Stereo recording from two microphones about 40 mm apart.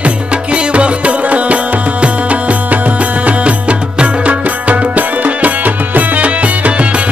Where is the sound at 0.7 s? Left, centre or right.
Right.